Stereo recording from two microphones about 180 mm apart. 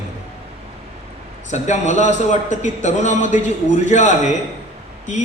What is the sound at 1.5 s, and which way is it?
A man's voice, 40° left (ahead or behind).